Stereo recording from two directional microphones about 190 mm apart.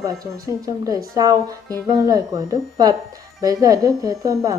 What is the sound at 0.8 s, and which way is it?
Speech, 20° right (ahead or behind).